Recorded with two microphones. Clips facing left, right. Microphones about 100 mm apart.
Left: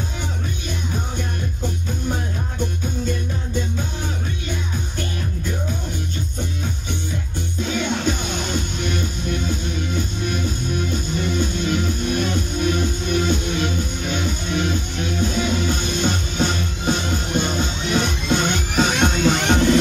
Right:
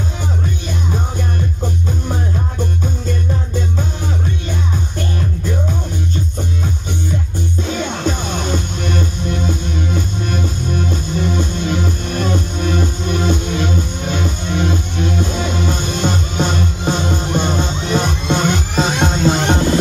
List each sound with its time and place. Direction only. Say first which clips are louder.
7.6 s music: even; 40° right (ahead or behind)